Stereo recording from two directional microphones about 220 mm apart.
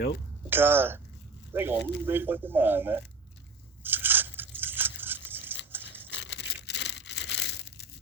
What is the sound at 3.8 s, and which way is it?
Biting, 10° right (ahead or behind).